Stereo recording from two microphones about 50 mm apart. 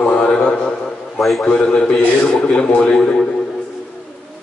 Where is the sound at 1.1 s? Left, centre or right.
Centre.